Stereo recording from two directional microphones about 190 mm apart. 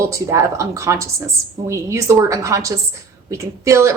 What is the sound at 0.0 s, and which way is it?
A woman's voice, 15° right (ahead or behind).